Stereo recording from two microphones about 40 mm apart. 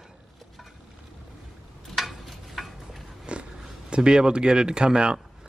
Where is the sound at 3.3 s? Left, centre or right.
Right.